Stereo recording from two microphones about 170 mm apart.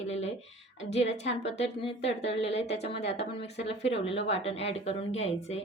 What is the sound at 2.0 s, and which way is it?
Speech, 90° left.